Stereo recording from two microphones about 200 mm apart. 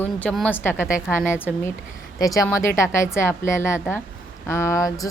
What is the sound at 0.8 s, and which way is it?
Speech, 5° right (ahead or behind).